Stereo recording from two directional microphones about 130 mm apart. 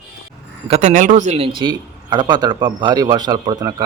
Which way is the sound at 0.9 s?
80° right.